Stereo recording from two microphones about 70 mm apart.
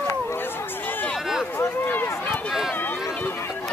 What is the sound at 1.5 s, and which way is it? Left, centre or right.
Run, left.